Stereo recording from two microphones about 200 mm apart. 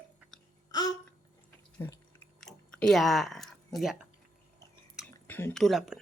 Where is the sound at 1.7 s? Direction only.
15° left (ahead or behind).